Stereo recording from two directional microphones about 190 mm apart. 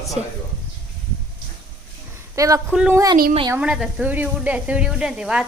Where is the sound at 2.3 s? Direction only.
15° right (ahead or behind).